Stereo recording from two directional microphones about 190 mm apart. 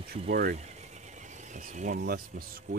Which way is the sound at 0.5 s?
35° right (ahead or behind).